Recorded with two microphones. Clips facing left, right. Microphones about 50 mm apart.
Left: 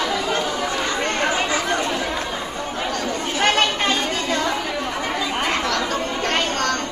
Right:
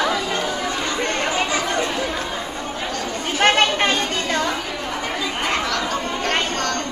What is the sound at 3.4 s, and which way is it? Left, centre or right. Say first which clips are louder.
Chatter: right 3 dB; right.